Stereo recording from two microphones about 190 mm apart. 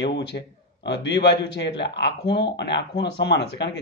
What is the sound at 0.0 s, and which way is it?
A man's voice, 65° left (ahead or behind).